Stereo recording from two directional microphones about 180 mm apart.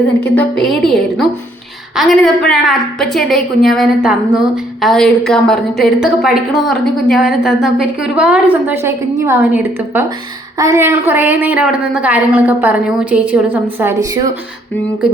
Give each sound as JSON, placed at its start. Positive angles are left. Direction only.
{"t": 0.3, "sound": "a woman's voice", "side_deg": 0}